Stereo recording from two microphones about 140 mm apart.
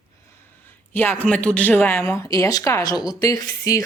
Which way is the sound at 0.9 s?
15° left (ahead or behind).